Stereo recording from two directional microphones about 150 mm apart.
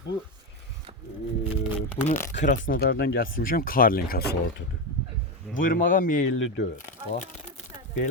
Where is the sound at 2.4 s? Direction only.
60° left (ahead or behind); by 4.3 s 85° left.